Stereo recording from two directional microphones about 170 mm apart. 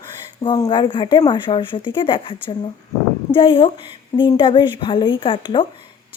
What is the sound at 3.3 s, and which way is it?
A woman's voice, 30° left (ahead or behind).